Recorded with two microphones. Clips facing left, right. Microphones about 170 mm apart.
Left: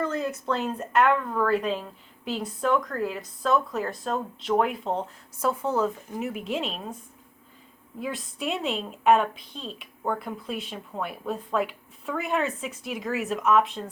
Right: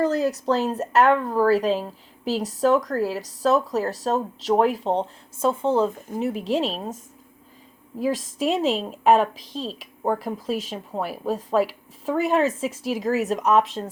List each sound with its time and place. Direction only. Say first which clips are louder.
0.0 s a sound: right 7 dB; 35° right (ahead or behind)
0.4 s speech: right 6 dB; 35° right (ahead or behind)
7.9 s speech: right 8 dB; 35° right (ahead or behind)